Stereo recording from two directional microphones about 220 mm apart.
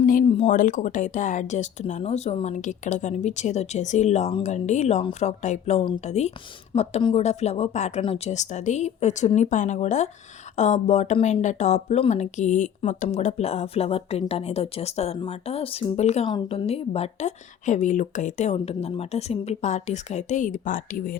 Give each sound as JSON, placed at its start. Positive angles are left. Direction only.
{"t": 0.0, "sound": "speech", "side_deg": 40}